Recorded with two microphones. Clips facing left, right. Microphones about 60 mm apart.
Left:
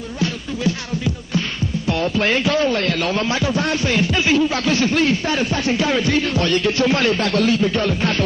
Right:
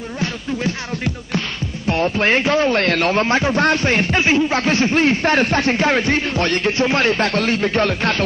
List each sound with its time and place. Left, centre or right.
0.7 s speech: right
1.9 s speech: right
2.7 s speech: right
5.2 s speech: right
6.8 s speech: right